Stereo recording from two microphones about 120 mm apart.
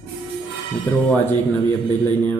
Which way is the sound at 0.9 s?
15° left (ahead or behind).